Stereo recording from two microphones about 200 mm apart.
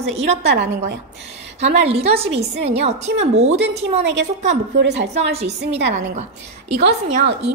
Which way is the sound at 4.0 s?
60° right (ahead or behind).